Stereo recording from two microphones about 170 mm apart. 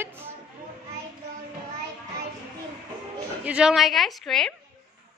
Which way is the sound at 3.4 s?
5° right (ahead or behind).